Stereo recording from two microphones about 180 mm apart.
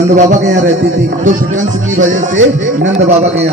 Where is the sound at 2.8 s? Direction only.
40° right (ahead or behind).